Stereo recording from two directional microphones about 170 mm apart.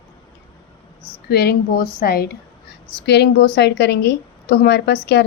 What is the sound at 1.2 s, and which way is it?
A woman's voice, 70° left (ahead or behind).